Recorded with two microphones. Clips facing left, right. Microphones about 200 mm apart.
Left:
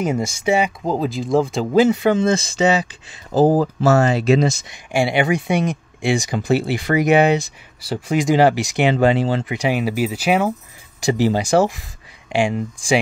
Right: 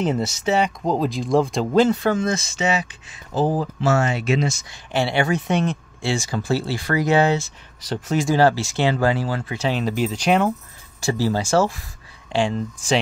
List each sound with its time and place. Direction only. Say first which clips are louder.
0.0 s speech: left 1 dB; 10° left (ahead or behind)
2.1 s speech: left 5 dB; 30° left (ahead or behind)
4.6 s speech: left 3 dB; 15° left (ahead or behind)
11.0 s speech: left 4 dB; 20° left (ahead or behind)